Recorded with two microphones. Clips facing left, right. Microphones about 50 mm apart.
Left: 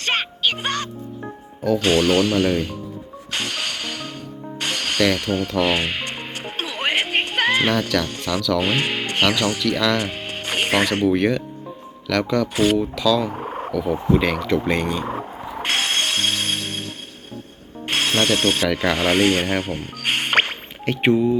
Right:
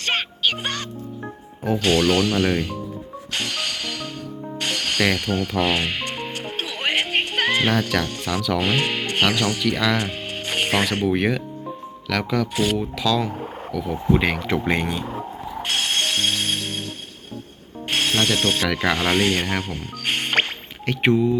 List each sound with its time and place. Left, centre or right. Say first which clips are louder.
0.0 s music: left 1 dB; centre
1.8 s speech: left 1 dB; centre
3.3 s music: left 1 dB; centre
8.0 s speech: left 1 dB; centre
8.4 s speech: left 2 dB; centre
8.6 s speech: even; centre
13.3 s frog: left 3 dB; left
13.7 s speech: left 4 dB; centre
14.1 s speech: even; centre
15.8 s music: right 1 dB; centre
17.8 s speech: left 1 dB; centre